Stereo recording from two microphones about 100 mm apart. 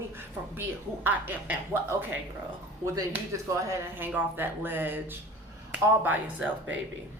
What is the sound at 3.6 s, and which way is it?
Speech, 30° right (ahead or behind).